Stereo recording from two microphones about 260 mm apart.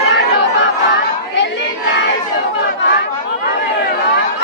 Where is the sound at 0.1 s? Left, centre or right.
Left.